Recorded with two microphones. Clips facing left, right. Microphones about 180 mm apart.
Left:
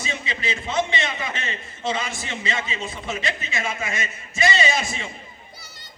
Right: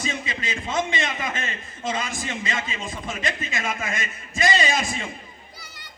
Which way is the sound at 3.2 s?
45° right (ahead or behind).